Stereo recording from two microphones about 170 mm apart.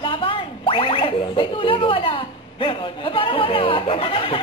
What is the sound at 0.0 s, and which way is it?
Boing, 30° left (ahead or behind).